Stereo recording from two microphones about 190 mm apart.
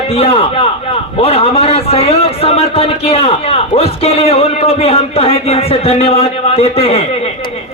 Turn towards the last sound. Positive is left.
turn(degrees=30)  # may be behind; listen again after turning